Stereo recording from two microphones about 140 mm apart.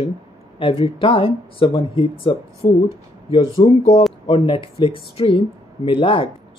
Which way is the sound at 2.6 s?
25° left (ahead or behind).